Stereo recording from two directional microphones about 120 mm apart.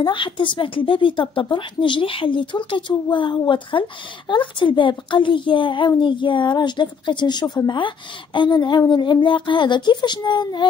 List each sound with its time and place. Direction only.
0.0 s a woman's voice: 45° left (ahead or behind)